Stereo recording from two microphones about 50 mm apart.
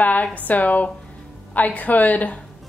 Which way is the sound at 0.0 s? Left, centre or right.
Left.